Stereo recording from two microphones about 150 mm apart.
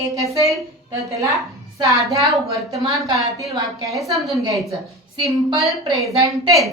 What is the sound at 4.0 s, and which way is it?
Speech, centre (ahead or behind).